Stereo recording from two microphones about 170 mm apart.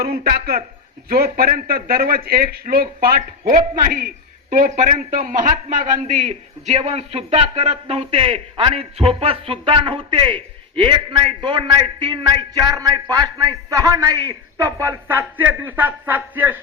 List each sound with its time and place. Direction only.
0.0 s a man's voice: 60° right (ahead or behind); by 16.6 s 10° right (ahead or behind)